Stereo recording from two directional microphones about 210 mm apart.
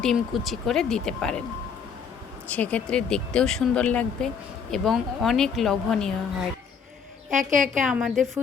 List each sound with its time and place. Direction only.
0.0 s speech: centre (ahead or behind)
2.5 s speech: 5° left (ahead or behind)
7.3 s a woman's voice: 40° right (ahead or behind)
7.7 s speech: 5° right (ahead or behind)